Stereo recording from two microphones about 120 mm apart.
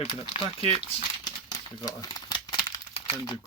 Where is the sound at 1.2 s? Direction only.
35° left (ahead or behind).